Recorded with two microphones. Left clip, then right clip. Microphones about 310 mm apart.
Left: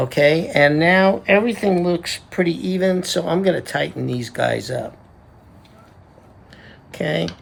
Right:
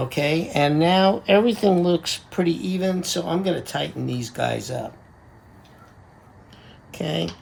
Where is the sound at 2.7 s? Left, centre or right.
Centre.